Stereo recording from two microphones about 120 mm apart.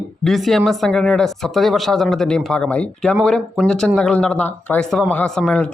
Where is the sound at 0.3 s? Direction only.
Centre (ahead or behind).